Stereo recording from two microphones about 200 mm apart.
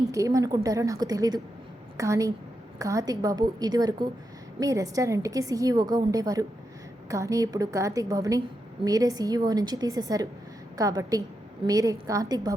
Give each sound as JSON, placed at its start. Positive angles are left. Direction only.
{"t": 0.1, "sound": "a woman's voice", "side_deg": -15}